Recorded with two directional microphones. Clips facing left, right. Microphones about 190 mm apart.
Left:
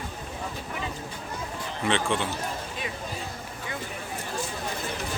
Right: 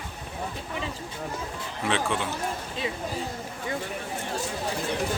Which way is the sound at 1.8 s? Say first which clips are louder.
Left 1 dB; 5° right (ahead or behind).